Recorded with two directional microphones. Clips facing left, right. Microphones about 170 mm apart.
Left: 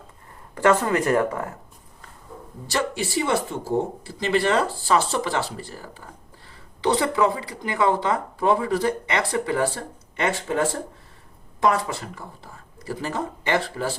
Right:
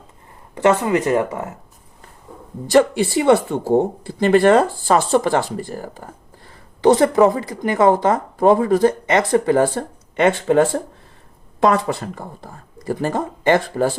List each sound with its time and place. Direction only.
0.5 s speech: 20° right (ahead or behind)
2.6 s speech: 55° right (ahead or behind)
11.6 s speech: 60° right (ahead or behind)